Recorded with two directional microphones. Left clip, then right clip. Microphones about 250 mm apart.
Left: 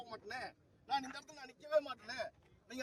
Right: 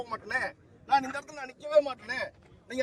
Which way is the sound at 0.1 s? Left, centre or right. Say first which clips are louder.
Right 15 dB; centre.